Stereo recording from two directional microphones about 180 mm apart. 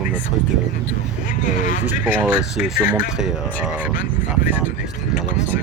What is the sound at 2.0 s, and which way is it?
Speech, 5° right (ahead or behind).